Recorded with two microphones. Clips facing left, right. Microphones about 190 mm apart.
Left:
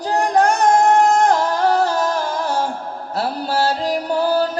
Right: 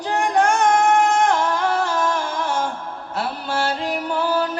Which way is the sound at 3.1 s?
35° left (ahead or behind).